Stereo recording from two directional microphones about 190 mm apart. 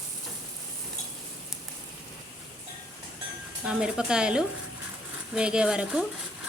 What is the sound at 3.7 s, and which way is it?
Speech, 5° right (ahead or behind).